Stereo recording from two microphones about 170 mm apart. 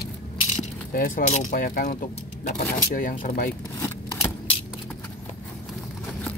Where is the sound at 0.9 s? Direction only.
55° left (ahead or behind).